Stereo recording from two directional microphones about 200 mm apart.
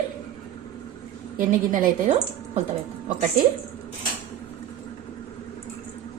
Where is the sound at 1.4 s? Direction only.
40° right (ahead or behind).